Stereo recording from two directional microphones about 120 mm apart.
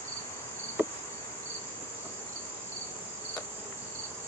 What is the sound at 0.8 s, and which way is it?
Cricket, 15° right (ahead or behind).